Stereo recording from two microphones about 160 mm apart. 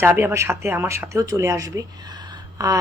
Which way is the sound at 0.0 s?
15° right (ahead or behind).